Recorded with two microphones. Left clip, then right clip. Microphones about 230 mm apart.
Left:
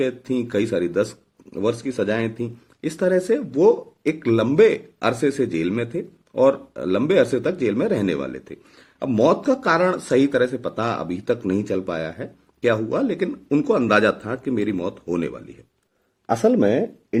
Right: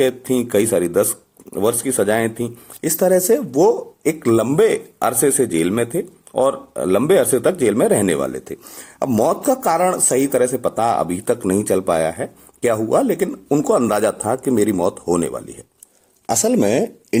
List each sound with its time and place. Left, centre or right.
0.0 s speech: centre
9.0 s speech: centre